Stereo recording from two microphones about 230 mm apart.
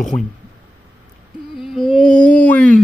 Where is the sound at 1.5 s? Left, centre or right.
Centre.